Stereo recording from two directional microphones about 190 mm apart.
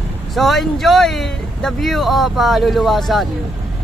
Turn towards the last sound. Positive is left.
turn(degrees=0)  # may be behind; listen again after turning